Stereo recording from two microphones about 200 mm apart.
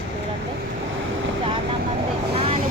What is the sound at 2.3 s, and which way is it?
Speech, 30° right (ahead or behind).